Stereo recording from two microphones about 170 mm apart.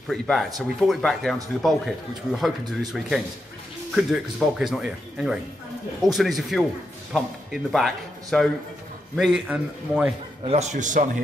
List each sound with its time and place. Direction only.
0.1 s speech: centre (ahead or behind)
10.4 s a man's voice: 40° right (ahead or behind)